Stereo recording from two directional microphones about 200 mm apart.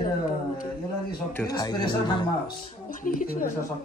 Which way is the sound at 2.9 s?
40° left (ahead or behind).